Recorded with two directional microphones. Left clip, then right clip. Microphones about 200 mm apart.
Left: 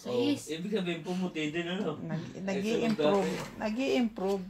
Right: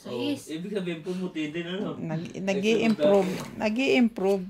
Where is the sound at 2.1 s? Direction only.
60° right (ahead or behind).